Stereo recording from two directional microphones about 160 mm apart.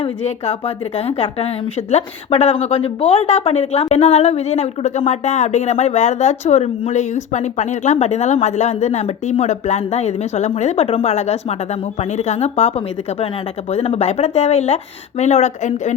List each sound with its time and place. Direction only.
0.0 s speech: 40° left (ahead or behind)